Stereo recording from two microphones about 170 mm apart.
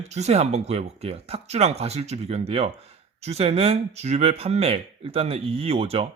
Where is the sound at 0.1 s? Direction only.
40° right (ahead or behind).